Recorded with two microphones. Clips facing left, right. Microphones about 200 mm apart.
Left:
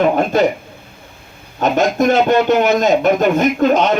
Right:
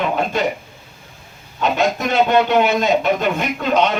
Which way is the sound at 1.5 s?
45° left (ahead or behind).